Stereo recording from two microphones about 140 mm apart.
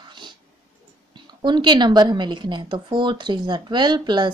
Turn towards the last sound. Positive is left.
turn(degrees=-35)  # may be behind; listen again after turning